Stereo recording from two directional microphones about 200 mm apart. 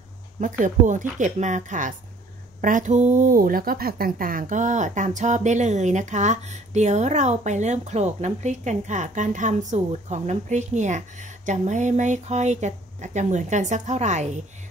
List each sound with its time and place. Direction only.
0.4 s a woman's voice: 40° right (ahead or behind)